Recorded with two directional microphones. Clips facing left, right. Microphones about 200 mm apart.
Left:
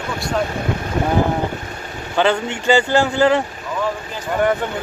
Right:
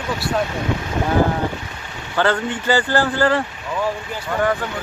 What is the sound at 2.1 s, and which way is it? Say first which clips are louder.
Speech: left 2 dB; 20° left (ahead or behind).